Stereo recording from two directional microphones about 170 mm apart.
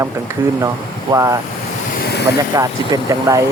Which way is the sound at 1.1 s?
20° right (ahead or behind).